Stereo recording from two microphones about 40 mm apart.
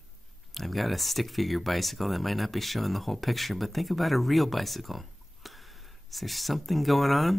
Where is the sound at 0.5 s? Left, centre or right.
Centre.